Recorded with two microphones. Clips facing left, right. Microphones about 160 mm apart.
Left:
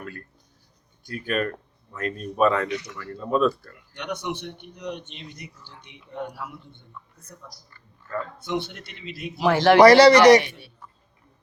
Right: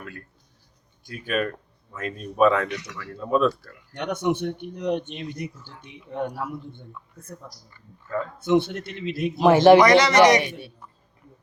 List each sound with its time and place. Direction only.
0.0 s speech: centre (ahead or behind)
3.9 s speech: 50° right (ahead or behind)
8.4 s speech: 50° right (ahead or behind)
9.4 s a man's voice: 20° right (ahead or behind)
9.8 s speech: 35° left (ahead or behind)